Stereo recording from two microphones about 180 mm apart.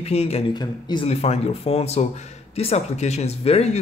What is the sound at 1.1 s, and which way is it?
Speech, 35° left (ahead or behind).